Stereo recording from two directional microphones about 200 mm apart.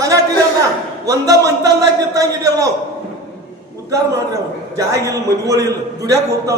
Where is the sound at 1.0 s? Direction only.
15° right (ahead or behind).